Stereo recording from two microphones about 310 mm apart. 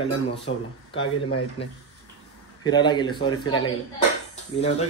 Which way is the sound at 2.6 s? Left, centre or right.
Centre.